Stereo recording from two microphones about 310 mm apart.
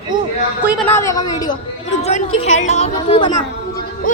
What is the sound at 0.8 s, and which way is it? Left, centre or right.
A woman's voice, centre.